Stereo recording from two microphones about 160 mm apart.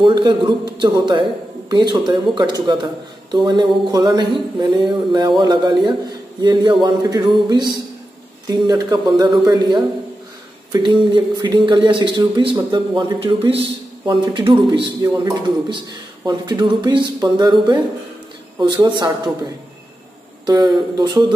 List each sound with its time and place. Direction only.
0.0 s speech: 30° right (ahead or behind)
20.4 s speech: 25° right (ahead or behind)